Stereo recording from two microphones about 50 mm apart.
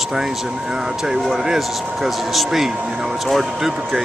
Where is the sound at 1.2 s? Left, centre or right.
Centre.